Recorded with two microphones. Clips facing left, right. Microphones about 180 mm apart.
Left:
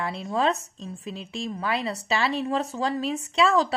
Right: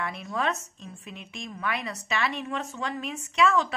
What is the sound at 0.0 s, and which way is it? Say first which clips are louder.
Speech: left 5 dB; 30° left (ahead or behind).